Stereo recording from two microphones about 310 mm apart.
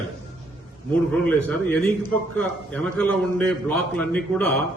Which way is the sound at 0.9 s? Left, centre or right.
Centre.